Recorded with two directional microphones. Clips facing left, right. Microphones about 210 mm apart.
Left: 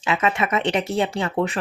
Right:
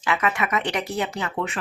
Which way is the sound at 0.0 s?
25° left (ahead or behind).